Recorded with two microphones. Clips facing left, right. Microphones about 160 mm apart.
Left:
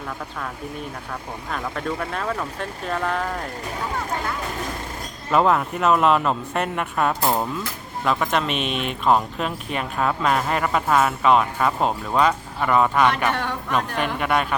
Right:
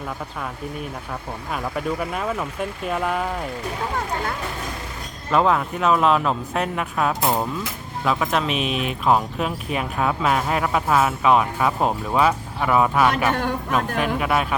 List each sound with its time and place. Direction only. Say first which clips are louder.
1.5 s speech: right 2 dB; 10° right (ahead or behind)
5.3 s speech: even; centre (ahead or behind)
13.3 s a man's voice: right 3 dB; 45° right (ahead or behind)
13.7 s speech: even; 5° right (ahead or behind)